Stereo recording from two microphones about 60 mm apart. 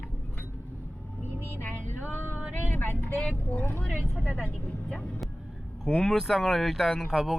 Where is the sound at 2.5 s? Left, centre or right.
Left.